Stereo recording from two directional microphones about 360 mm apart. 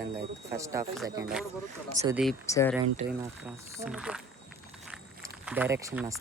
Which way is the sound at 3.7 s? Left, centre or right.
Centre.